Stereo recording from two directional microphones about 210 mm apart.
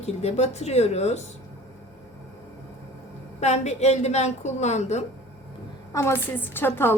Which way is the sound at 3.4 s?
30° left (ahead or behind).